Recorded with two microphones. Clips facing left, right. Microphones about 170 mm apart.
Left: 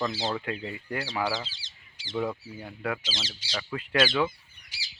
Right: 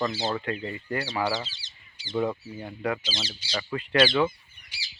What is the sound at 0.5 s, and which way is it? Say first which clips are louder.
Speech: right 3 dB; 5° left (ahead or behind).